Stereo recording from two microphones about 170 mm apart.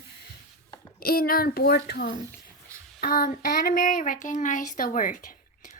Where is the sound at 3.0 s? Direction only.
55° left (ahead or behind).